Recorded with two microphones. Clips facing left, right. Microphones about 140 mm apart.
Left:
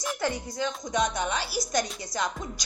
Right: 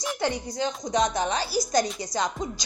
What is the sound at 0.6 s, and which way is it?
A woman's voice, 40° right (ahead or behind).